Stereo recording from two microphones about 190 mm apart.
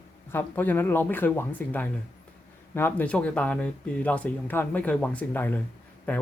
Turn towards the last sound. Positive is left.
turn(degrees=10)  # may be behind; listen again after turning